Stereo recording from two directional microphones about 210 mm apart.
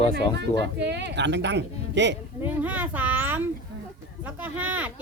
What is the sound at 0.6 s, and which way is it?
Speech, 55° right (ahead or behind).